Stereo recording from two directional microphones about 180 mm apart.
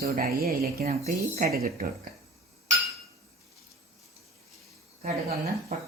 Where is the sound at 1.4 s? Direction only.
55° right (ahead or behind).